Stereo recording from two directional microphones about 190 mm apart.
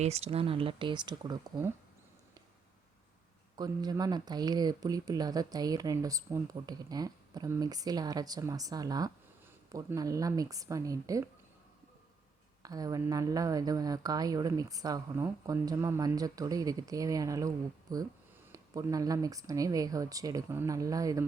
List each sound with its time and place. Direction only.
0.0 s speech: 35° right (ahead or behind)
3.6 s speech: 20° right (ahead or behind)
12.6 s speech: 20° right (ahead or behind)